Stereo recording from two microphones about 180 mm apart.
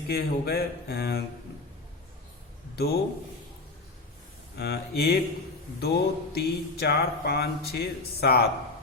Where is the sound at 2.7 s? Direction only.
65° left (ahead or behind).